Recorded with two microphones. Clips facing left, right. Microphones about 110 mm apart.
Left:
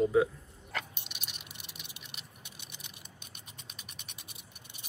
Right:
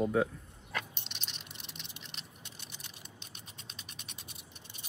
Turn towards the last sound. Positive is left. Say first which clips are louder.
# right 1 dB
turn(degrees=5)  # may be behind; listen again after turning